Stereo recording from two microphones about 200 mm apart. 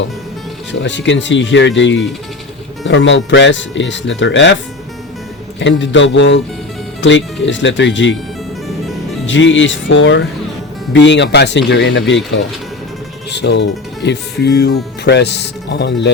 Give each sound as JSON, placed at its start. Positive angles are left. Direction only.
{"t": 0.7, "sound": "speech", "side_deg": 65}
{"t": 5.5, "sound": "speech", "side_deg": 65}
{"t": 9.2, "sound": "speech", "side_deg": 70}